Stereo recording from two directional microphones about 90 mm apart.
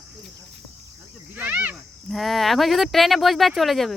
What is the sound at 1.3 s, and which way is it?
Speech, 20° right (ahead or behind).